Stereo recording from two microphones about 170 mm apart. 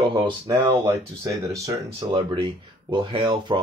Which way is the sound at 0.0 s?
30° right (ahead or behind).